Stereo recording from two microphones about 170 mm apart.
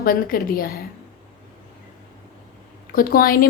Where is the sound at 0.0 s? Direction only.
60° left (ahead or behind).